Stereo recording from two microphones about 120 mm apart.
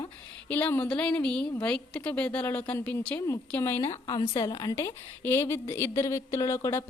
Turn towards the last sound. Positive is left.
turn(degrees=20)  # may be behind; listen again after turning